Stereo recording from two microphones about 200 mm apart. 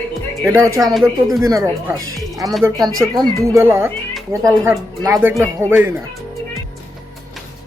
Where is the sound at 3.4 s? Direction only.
15° right (ahead or behind).